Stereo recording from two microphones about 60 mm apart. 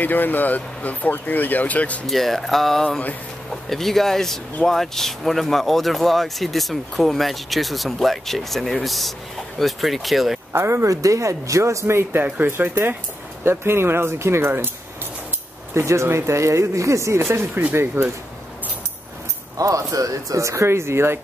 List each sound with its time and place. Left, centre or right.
0.0 s speech: left
2.0 s speech: centre
10.5 s speech: right
10.9 s speech: right
12.2 s speech: right
15.7 s speech: right
19.6 s speech: right